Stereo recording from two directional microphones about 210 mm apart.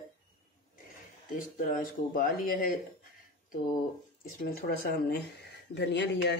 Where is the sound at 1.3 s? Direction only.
40° left (ahead or behind).